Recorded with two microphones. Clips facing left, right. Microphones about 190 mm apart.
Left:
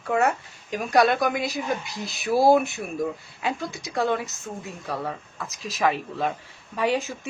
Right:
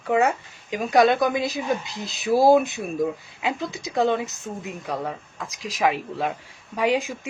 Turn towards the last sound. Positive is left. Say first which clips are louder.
# right 2 dB
turn(degrees=-15)  # may be behind; listen again after turning